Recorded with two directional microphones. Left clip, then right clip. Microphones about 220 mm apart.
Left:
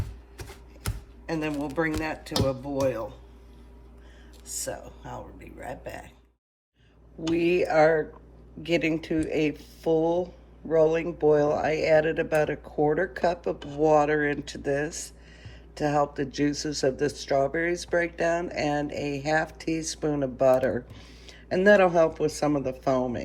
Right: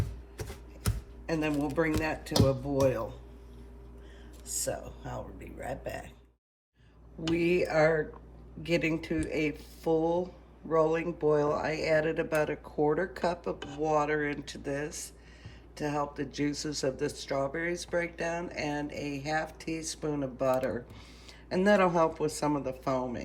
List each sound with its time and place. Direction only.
0.3 s a sound: 5° left (ahead or behind)
1.3 s speech: 20° left (ahead or behind)
4.5 s speech: 15° left (ahead or behind)
7.3 s speech: centre (ahead or behind)